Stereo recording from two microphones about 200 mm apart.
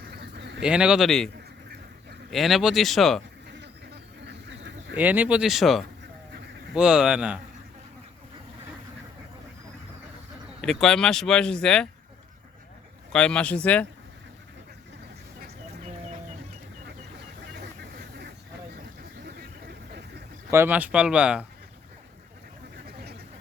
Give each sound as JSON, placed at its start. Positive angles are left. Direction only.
{"t": 0.1, "sound": "a sound", "side_deg": -60}
{"t": 0.6, "sound": "speech", "side_deg": -5}
{"t": 2.3, "sound": "speech", "side_deg": 0}
{"t": 4.3, "sound": "duck", "side_deg": -60}
{"t": 4.9, "sound": "speech", "side_deg": -10}
{"t": 10.6, "sound": "speech", "side_deg": 0}
{"t": 13.1, "sound": "speech", "side_deg": 5}
{"t": 19.2, "sound": "vehicle", "side_deg": -55}
{"t": 20.5, "sound": "speech", "side_deg": -10}